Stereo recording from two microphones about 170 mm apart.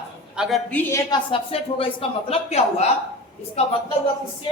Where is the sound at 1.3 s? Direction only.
35° left (ahead or behind).